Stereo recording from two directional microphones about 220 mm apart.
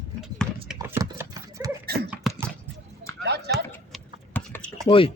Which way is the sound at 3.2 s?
50° right (ahead or behind).